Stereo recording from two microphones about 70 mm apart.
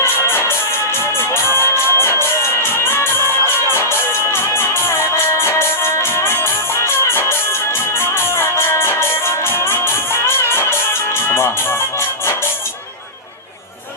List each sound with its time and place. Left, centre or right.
0.0 s music: left